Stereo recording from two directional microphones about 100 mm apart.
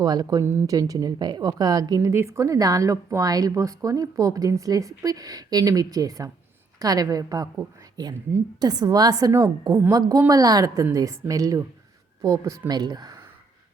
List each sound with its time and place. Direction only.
0.0 s a woman's voice: 40° right (ahead or behind)